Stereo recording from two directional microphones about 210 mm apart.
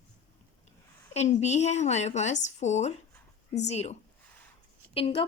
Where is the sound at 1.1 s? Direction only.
30° left (ahead or behind).